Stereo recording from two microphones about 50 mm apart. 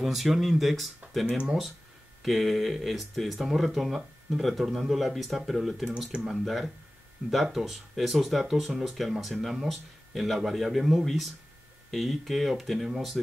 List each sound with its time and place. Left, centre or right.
0.0 s speech: centre
2.2 s speech: centre